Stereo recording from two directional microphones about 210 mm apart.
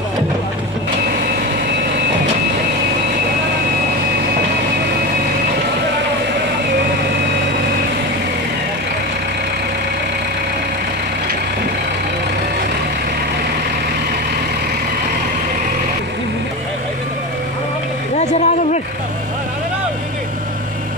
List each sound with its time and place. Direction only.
18.1 s vehicle: 35° left (ahead or behind)